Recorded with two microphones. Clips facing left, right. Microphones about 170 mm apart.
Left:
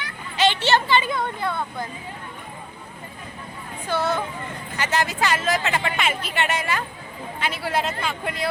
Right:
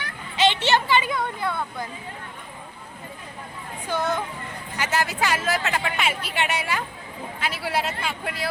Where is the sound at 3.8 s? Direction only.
15° right (ahead or behind).